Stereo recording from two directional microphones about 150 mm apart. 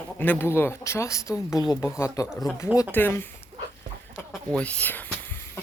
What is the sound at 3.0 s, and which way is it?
Speech, 15° left (ahead or behind).